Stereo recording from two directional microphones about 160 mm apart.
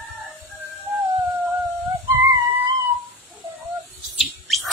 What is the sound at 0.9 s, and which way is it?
Music, 10° right (ahead or behind).